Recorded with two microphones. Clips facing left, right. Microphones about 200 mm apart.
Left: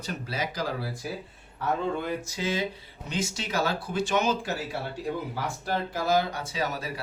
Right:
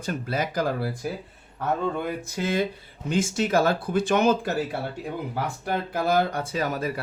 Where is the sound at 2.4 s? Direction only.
55° right (ahead or behind).